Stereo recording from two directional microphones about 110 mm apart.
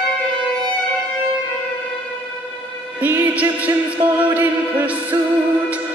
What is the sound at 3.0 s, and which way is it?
Music, 15° right (ahead or behind).